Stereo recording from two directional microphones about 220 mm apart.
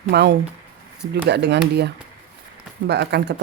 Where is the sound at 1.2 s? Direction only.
50° right (ahead or behind).